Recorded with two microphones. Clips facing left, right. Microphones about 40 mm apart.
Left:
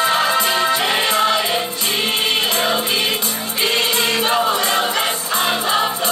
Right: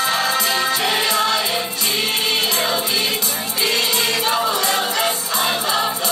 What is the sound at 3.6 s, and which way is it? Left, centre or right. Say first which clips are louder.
Choir: left 2 dB; left.